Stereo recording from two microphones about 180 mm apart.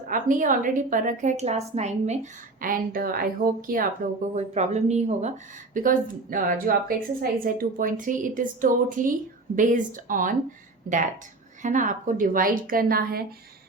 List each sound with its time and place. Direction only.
0.1 s a woman's voice: 45° right (ahead or behind)
2.6 s a woman's voice: 50° right (ahead or behind)
4.4 s a woman's voice: 40° right (ahead or behind); by 13.2 s 55° right (ahead or behind)